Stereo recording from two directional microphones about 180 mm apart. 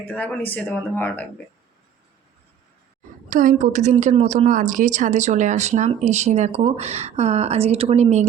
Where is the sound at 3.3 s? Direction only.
45° right (ahead or behind).